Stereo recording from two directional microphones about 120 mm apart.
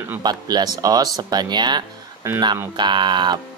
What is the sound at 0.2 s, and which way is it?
Speech, 35° right (ahead or behind).